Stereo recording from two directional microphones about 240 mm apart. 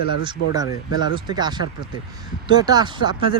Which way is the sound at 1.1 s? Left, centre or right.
Centre.